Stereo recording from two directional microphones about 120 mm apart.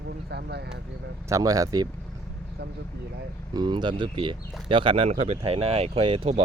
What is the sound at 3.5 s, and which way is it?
Speech, 40° right (ahead or behind).